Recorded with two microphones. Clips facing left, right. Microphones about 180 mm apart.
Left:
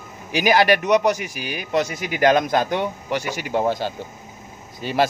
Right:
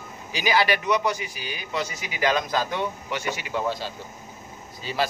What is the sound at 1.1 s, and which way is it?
Speech, 70° left (ahead or behind).